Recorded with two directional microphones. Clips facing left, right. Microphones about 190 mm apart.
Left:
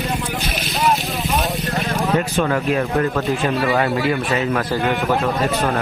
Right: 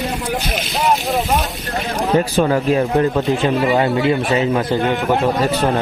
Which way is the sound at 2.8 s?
15° right (ahead or behind).